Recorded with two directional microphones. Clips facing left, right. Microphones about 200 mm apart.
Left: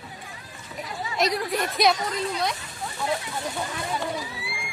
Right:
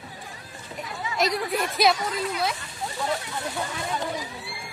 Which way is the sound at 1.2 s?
Centre (ahead or behind).